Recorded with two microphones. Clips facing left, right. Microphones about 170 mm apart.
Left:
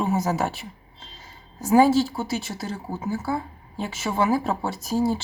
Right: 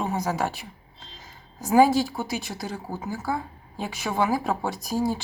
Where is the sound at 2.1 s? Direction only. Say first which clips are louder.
Left 2 dB; centre (ahead or behind).